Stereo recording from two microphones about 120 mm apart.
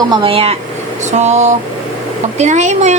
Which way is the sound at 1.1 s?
70° right (ahead or behind).